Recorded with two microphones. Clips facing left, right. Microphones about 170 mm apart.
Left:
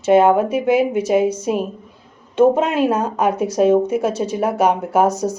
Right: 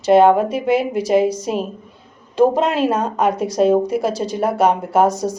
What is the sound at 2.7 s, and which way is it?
Speech, centre (ahead or behind).